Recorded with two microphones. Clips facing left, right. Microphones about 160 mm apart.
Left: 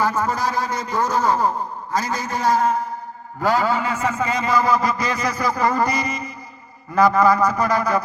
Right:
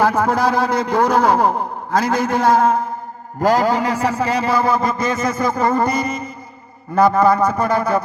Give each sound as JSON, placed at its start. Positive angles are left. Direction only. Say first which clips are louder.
{"t": 0.0, "sound": "a man's voice", "louder": "right 5 dB", "side_deg": -60}
{"t": 3.4, "sound": "a man's voice", "louder": "right 4 dB", "side_deg": -40}